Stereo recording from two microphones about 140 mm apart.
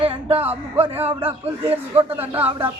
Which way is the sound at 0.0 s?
40° right (ahead or behind).